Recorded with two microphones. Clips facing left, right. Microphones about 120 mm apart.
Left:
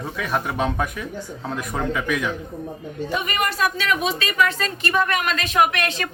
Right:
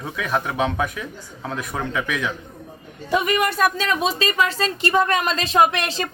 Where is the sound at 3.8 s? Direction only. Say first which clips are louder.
Right 2 dB; 30° right (ahead or behind).